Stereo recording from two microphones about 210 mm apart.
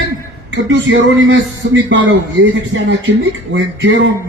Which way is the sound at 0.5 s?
65° right (ahead or behind).